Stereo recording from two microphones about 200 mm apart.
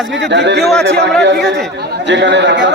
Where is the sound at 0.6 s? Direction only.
Centre (ahead or behind).